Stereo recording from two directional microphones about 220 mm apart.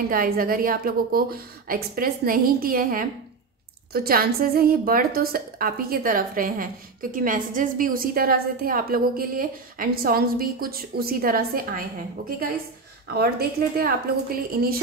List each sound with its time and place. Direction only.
0.1 s a woman's voice: 40° right (ahead or behind)
13.2 s a woman's voice: 45° right (ahead or behind)